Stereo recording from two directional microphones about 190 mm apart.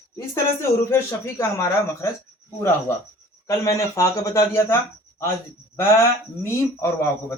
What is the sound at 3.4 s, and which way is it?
Speech, 15° left (ahead or behind).